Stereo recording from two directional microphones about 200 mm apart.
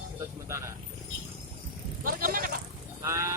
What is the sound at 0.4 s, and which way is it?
Speech, 15° right (ahead or behind).